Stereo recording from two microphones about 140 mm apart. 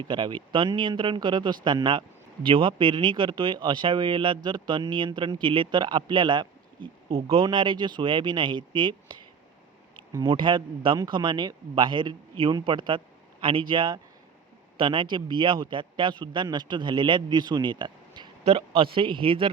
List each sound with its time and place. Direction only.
0.0 s speech: 35° right (ahead or behind)